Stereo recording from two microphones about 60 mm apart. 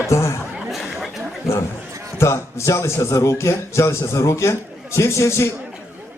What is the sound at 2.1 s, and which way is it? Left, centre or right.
A man's voice, left.